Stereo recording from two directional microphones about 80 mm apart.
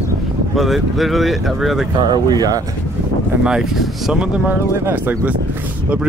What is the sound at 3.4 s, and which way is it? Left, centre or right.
Speech, centre.